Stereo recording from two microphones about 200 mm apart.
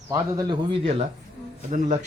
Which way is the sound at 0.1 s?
20° right (ahead or behind).